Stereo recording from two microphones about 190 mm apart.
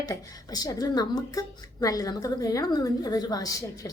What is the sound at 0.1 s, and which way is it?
A woman's voice, 20° left (ahead or behind).